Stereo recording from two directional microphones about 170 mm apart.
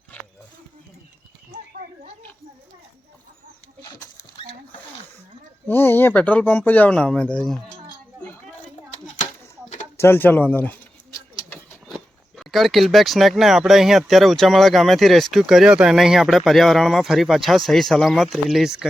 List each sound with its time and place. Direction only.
4.2 s rodents: 35° left (ahead or behind)
5.6 s speech: 10° left (ahead or behind)
10.0 s speech: 15° left (ahead or behind)
11.9 s speech: centre (ahead or behind)